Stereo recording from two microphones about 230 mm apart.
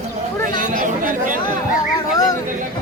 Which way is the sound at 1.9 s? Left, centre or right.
Centre.